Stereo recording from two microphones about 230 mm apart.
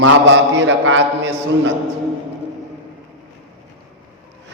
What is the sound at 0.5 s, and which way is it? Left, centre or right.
A man's voice, right.